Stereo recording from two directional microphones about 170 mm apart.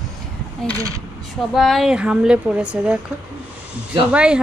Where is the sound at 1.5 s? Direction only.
Centre (ahead or behind).